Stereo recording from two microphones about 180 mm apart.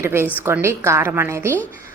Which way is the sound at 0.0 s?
15° right (ahead or behind).